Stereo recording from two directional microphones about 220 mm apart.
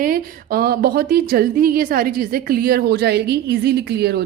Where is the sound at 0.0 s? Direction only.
40° right (ahead or behind).